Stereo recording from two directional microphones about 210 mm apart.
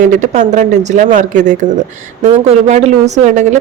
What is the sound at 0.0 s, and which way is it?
A woman's voice, 35° right (ahead or behind).